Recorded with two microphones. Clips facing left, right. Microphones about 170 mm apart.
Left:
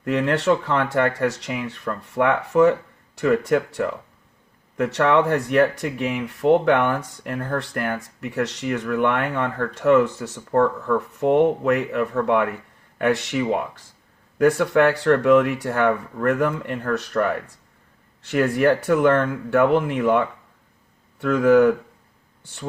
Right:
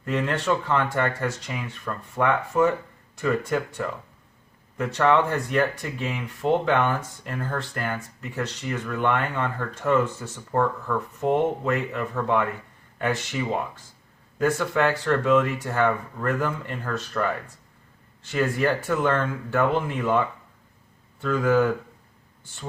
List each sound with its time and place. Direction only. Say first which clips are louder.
0.0 s speech: left 5 dB; 70° left (ahead or behind)